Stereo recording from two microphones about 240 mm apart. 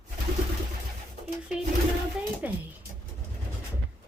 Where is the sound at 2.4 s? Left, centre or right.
Centre.